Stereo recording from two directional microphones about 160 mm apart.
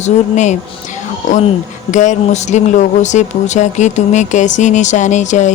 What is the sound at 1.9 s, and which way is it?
Speech, 50° left (ahead or behind).